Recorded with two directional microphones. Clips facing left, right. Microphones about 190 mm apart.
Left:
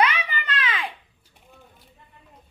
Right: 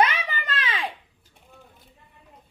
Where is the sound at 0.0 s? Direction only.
40° right (ahead or behind).